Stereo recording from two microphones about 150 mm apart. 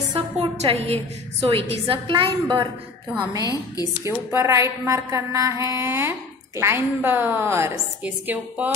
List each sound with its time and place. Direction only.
0.1 s a woman's voice: 40° right (ahead or behind)
3.3 s a woman's voice: 25° left (ahead or behind)
4.0 s a woman's voice: 20° right (ahead or behind)